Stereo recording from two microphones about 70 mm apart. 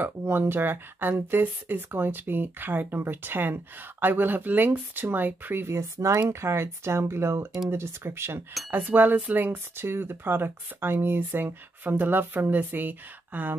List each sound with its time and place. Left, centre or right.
0.0 s speech: right